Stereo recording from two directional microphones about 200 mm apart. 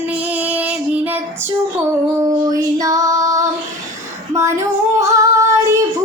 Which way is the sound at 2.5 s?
20° right (ahead or behind).